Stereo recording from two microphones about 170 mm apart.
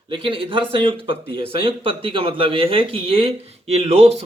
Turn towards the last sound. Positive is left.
turn(degrees=-35)  # may be behind; listen again after turning